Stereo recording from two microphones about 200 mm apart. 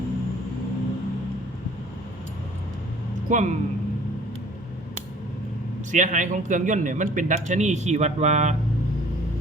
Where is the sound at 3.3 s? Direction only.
40° right (ahead or behind).